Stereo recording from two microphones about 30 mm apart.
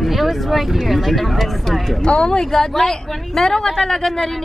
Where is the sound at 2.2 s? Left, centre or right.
Centre.